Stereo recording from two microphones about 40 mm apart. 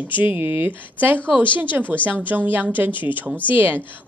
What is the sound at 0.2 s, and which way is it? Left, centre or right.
A woman's voice, right.